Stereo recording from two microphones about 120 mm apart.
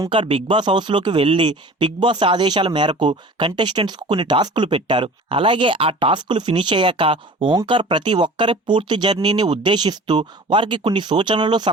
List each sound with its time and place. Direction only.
0.1 s speech: 50° right (ahead or behind)